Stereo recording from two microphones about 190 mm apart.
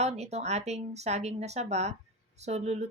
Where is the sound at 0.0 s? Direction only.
35° right (ahead or behind).